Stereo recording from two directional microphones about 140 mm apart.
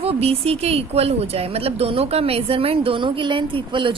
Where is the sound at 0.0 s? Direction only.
45° right (ahead or behind).